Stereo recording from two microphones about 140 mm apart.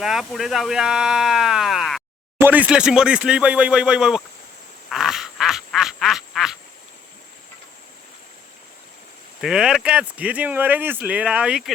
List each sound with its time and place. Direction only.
0.0 s speech: centre (ahead or behind)
2.4 s speech: 10° right (ahead or behind)
4.9 s quack: centre (ahead or behind)
9.4 s speech: 5° right (ahead or behind)